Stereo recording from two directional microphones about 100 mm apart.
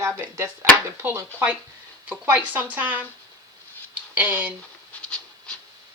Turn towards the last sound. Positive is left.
turn(degrees=10)  # may be behind; listen again after turning